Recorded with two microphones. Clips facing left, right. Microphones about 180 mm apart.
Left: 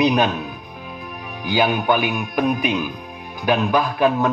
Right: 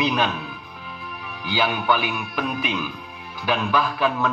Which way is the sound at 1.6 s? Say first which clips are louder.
Left 4 dB; 45° left (ahead or behind).